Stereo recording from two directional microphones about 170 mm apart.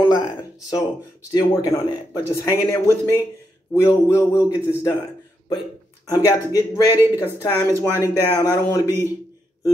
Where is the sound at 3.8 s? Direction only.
10° right (ahead or behind).